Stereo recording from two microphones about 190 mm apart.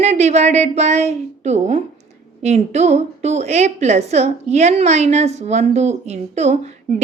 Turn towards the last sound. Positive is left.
turn(degrees=-35)  # may be behind; listen again after turning